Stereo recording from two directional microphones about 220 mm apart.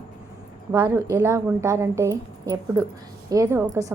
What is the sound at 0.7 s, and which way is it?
A woman's voice, 10° right (ahead or behind).